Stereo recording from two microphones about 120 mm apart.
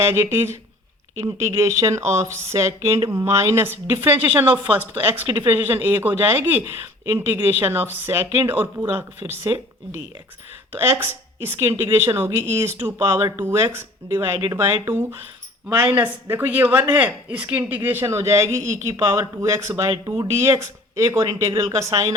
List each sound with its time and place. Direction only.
0.0 s speech: 20° right (ahead or behind)